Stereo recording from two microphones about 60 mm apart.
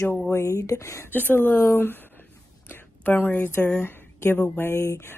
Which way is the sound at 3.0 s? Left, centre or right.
Left.